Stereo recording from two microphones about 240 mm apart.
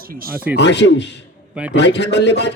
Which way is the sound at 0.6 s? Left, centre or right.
Left.